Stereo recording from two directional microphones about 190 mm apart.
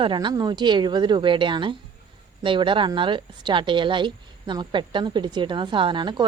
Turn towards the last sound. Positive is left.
turn(degrees=-25)  # may be behind; listen again after turning